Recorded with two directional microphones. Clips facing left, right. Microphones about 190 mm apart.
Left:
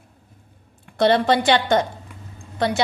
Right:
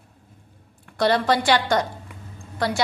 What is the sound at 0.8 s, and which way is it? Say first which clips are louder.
A woman's voice: left 3 dB; 25° left (ahead or behind).